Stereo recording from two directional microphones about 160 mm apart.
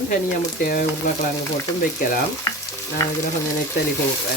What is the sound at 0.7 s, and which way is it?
Frying, 65° left (ahead or behind).